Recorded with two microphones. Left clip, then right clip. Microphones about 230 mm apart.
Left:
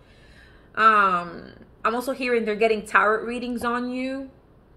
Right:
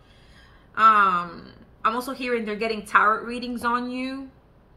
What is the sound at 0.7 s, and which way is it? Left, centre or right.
Speech, right.